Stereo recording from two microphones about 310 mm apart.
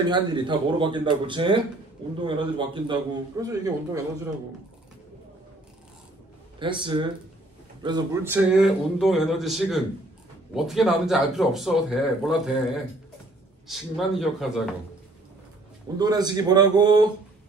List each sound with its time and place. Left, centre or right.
0.1 s a man's voice: centre
6.6 s a man's voice: centre
13.7 s speech: centre
16.0 s a man's voice: centre